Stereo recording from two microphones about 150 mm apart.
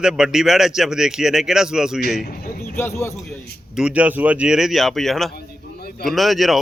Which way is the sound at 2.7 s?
15° left (ahead or behind).